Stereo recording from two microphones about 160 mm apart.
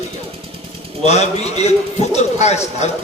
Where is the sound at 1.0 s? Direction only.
45° left (ahead or behind).